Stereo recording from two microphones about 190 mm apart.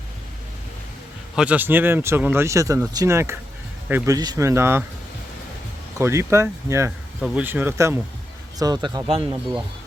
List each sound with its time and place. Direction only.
1.4 s speech: 10° right (ahead or behind)
6.0 s speech: 15° right (ahead or behind)